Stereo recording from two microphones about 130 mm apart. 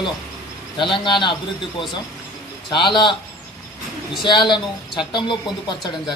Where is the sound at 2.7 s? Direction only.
35° left (ahead or behind).